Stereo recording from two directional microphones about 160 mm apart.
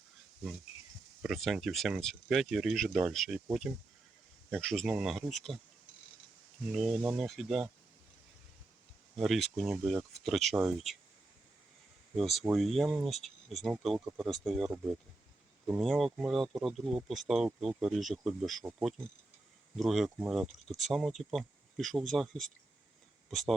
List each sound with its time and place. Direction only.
1.2 s speech: centre (ahead or behind)
4.6 s speech: centre (ahead or behind)
6.7 s speech: centre (ahead or behind)
9.1 s speech: centre (ahead or behind)
12.5 s speech: centre (ahead or behind)